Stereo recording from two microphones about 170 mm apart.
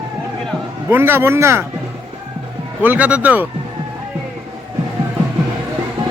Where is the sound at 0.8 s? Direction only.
15° right (ahead or behind).